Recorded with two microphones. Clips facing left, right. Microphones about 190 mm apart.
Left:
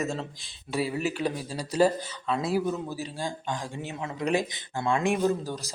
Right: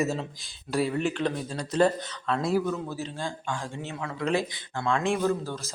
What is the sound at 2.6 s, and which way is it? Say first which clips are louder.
Speech: even; 15° left (ahead or behind).